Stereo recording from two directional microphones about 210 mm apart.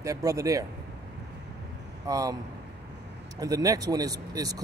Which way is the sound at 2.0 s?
15° right (ahead or behind).